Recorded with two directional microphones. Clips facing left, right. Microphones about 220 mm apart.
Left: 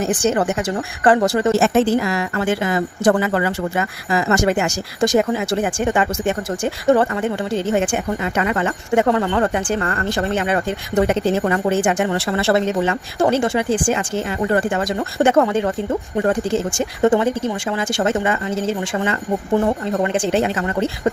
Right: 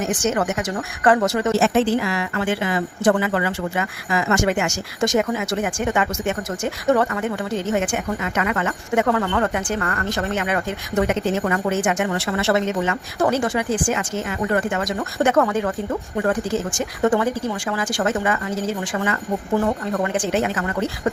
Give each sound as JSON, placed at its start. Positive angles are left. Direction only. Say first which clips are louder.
{"t": 0.0, "sound": "a woman's voice", "louder": "left 3 dB", "side_deg": 35}
{"t": 1.5, "sound": "a woman's voice", "louder": "left 2 dB", "side_deg": 45}